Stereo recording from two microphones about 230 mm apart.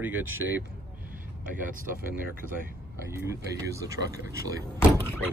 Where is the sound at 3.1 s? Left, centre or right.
Centre.